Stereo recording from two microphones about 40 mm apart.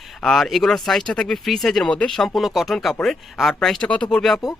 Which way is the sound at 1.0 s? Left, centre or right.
Left.